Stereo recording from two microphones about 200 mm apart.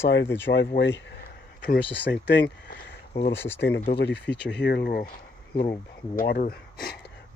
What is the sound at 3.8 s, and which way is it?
Speech, 60° left (ahead or behind).